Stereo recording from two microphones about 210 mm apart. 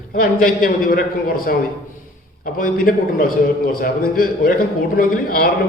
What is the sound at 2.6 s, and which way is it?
A man's voice, 40° left (ahead or behind).